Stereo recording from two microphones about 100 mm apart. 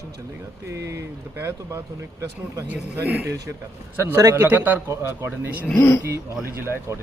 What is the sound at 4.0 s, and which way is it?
Speech, 35° right (ahead or behind).